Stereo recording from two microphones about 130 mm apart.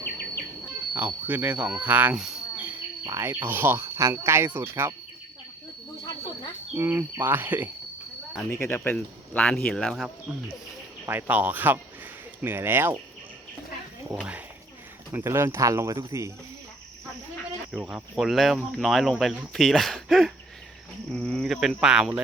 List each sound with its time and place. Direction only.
0.9 s speech: 15° right (ahead or behind)
2.6 s speech: 15° right (ahead or behind)
6.7 s speech: 15° right (ahead or behind)
8.4 s speech: 20° left (ahead or behind); by 10.1 s 5° left (ahead or behind)
11.0 s speech: 15° right (ahead or behind)
15.1 s speech: 20° right (ahead or behind)
17.7 s speech: 5° right (ahead or behind)